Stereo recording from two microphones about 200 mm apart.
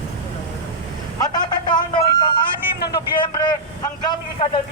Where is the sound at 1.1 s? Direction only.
20° left (ahead or behind).